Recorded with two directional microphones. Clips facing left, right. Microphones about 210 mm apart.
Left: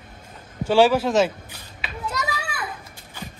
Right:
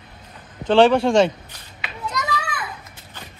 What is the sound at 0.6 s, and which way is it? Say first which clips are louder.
Speech: right 3 dB; 5° left (ahead or behind).